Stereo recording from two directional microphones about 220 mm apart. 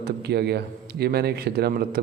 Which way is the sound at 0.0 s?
50° right (ahead or behind).